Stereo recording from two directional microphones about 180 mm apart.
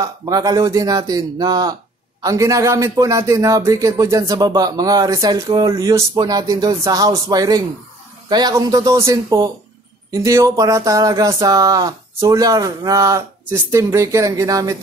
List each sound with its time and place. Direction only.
0.0 s a man's voice: 20° right (ahead or behind)